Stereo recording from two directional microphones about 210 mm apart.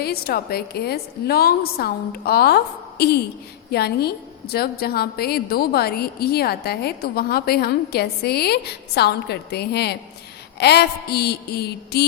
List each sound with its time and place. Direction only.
0.0 s a woman's voice: 45° left (ahead or behind)
3.7 s a woman's voice: 50° left (ahead or behind)